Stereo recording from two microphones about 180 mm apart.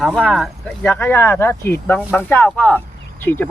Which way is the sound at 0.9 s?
15° left (ahead or behind).